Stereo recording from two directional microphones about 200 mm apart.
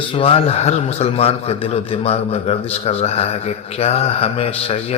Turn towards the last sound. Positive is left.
turn(degrees=30)  # may be behind; listen again after turning